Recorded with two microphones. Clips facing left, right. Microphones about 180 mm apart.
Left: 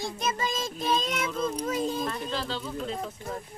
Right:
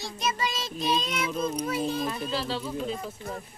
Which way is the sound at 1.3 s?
15° right (ahead or behind).